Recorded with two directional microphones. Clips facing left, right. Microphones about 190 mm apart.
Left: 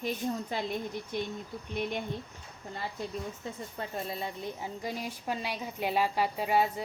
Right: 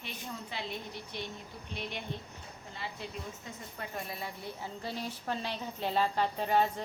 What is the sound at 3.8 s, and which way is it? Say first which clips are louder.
Speech: left 4 dB; 25° left (ahead or behind).